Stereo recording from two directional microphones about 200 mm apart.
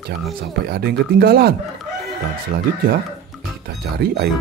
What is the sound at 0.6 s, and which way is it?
Speech, 55° right (ahead or behind).